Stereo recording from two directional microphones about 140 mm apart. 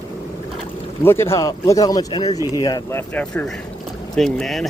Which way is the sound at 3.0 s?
10° left (ahead or behind).